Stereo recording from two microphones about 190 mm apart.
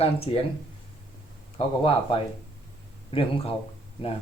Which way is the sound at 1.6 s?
30° left (ahead or behind).